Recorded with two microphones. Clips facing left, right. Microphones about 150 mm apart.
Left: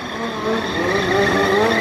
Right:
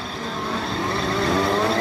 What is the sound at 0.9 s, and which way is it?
Vehicle, 90° left.